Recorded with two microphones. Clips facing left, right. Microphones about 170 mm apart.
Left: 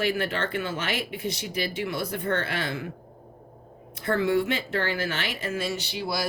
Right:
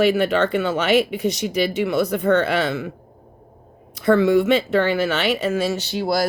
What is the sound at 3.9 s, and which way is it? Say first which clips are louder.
Speech: right 8 dB; 80° right.